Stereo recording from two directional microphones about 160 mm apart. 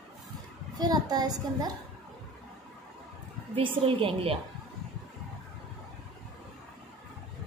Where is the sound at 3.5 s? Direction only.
35° right (ahead or behind).